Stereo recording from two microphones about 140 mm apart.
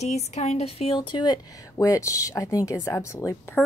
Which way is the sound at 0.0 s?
55° left (ahead or behind).